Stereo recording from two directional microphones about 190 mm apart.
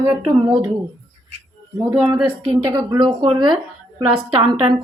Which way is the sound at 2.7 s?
20° right (ahead or behind).